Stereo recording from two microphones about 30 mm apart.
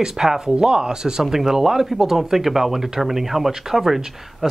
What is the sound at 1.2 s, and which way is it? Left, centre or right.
Speech, centre.